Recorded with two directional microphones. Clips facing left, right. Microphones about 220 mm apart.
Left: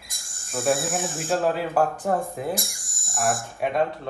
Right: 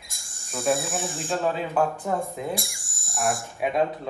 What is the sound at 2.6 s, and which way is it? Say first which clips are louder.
Speech: left 1 dB; 50° left (ahead or behind).